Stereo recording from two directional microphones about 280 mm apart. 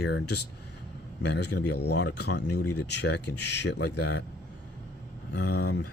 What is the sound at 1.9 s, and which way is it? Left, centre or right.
Speech, left.